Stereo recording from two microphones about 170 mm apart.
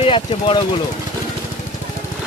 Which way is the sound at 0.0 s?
35° left (ahead or behind).